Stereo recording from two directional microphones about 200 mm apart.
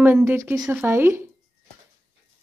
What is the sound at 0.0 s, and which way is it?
A woman's voice, 10° right (ahead or behind).